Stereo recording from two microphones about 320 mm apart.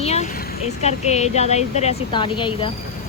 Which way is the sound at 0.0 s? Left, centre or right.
Left.